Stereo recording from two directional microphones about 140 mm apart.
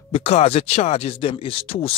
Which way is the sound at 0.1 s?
45° left (ahead or behind).